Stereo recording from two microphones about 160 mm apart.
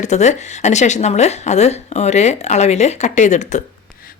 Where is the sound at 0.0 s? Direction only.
45° left (ahead or behind).